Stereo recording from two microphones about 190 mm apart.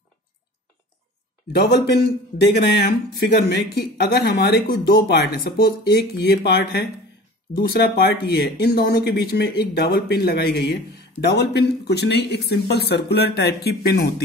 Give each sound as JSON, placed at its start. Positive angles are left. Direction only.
{"t": 1.5, "sound": "speech", "side_deg": 60}